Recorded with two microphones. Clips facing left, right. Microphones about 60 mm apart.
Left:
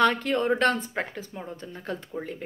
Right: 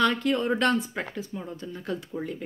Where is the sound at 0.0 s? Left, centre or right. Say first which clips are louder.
Left 1 dB; left.